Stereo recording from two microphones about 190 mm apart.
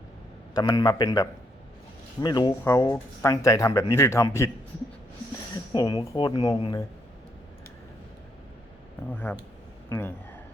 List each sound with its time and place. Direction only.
0.5 s speech: 20° left (ahead or behind)
5.7 s speech: 20° left (ahead or behind)
9.0 s speech: 10° left (ahead or behind)